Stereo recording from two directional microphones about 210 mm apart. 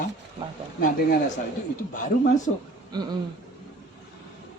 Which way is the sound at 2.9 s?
20° right (ahead or behind).